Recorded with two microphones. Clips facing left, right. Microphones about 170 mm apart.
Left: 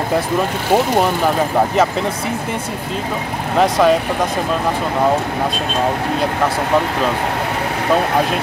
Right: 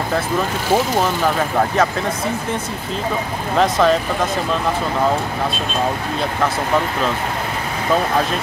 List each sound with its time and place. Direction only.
3.5 s speech: 10° left (ahead or behind)